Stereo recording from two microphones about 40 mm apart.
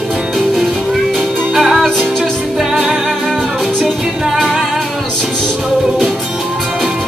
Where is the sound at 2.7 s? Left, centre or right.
Centre.